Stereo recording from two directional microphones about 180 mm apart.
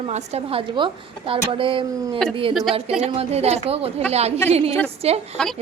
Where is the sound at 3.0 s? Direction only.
35° right (ahead or behind).